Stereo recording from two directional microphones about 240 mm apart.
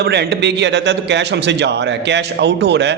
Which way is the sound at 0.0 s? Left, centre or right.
Right.